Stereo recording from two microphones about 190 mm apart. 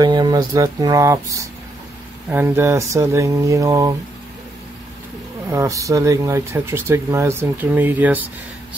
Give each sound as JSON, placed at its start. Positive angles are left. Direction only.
{"t": 0.0, "sound": "speech", "side_deg": -20}
{"t": 5.5, "sound": "speech", "side_deg": -15}